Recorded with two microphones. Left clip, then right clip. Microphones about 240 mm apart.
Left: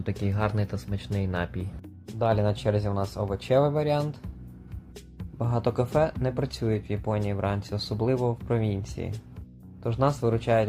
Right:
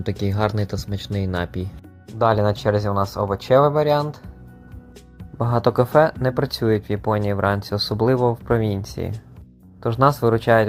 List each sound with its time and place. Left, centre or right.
0.2 s speech: centre
5.4 s speech: right